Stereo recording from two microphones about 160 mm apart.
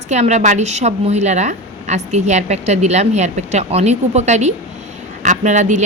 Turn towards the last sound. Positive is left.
turn(degrees=-50)  # may be behind; listen again after turning